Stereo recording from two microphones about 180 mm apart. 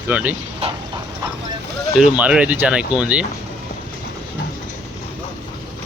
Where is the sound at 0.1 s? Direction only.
10° right (ahead or behind).